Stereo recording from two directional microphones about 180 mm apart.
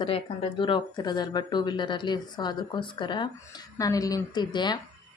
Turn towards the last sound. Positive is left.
turn(degrees=25)  # may be behind; listen again after turning